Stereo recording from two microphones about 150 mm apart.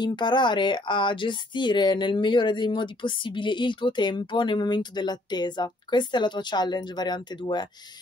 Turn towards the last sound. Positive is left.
turn(degrees=30)  # may be behind; listen again after turning